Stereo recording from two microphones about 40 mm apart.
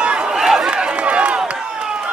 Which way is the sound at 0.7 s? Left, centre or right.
Right.